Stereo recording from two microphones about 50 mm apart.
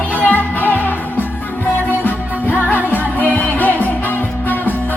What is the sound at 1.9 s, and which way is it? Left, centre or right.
Music, left.